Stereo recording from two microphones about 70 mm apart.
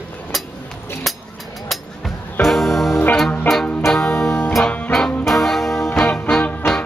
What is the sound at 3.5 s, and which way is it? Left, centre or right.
Music, left.